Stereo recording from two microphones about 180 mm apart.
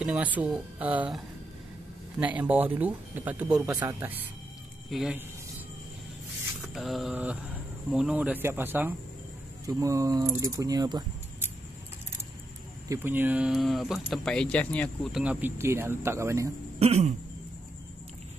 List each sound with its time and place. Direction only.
0.0 s speech: 10° right (ahead or behind)
6.7 s speech: centre (ahead or behind); by 11.1 s 20° right (ahead or behind)
12.8 s speech: 15° right (ahead or behind); by 15.2 s 5° left (ahead or behind)
15.2 s speech: 10° right (ahead or behind)
16.8 s throat clearing: 35° right (ahead or behind)